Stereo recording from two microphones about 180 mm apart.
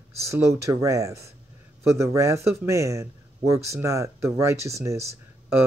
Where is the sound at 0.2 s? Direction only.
15° right (ahead or behind).